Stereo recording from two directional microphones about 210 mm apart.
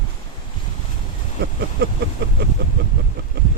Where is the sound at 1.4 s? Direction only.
50° right (ahead or behind).